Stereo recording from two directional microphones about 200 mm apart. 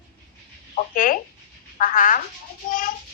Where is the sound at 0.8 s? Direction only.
45° left (ahead or behind).